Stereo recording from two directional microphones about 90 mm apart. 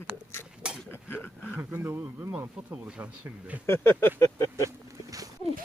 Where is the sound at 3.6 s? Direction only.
25° left (ahead or behind).